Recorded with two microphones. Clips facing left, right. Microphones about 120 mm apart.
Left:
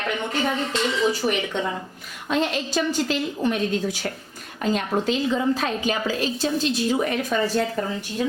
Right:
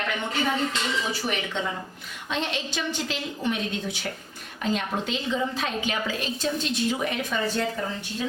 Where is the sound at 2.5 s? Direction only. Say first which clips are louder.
Left 6 dB; 40° left (ahead or behind).